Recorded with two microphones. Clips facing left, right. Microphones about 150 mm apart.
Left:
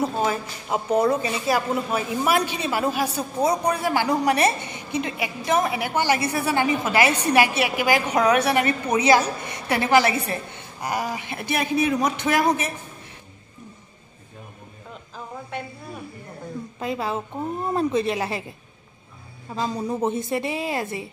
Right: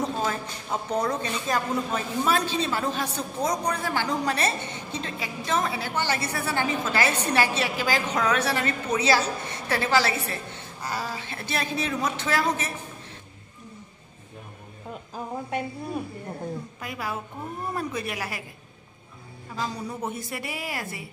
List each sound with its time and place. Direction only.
0.0 s a woman's voice: 10° left (ahead or behind)
16.8 s a woman's voice: 25° left (ahead or behind)
19.5 s a woman's voice: 25° left (ahead or behind)